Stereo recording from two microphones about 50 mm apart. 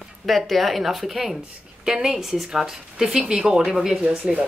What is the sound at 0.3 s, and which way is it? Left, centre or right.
Speech, centre.